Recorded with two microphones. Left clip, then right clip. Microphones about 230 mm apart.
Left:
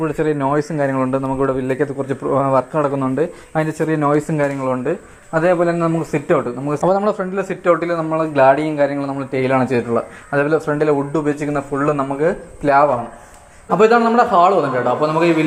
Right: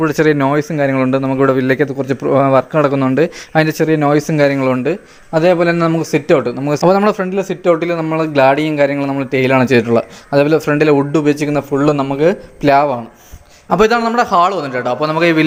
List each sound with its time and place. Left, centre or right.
0.0 s a man's voice: right